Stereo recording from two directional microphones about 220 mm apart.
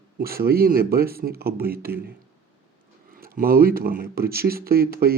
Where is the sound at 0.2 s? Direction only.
45° right (ahead or behind).